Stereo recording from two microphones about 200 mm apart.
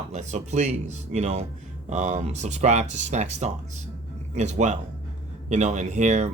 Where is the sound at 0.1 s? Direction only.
35° right (ahead or behind).